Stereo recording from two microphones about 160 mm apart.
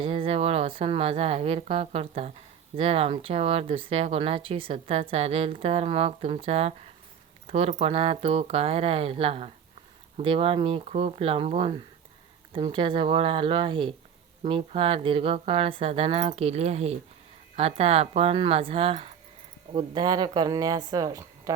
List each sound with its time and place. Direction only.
0.0 s speech: 35° right (ahead or behind)
19.7 s speech: 25° right (ahead or behind)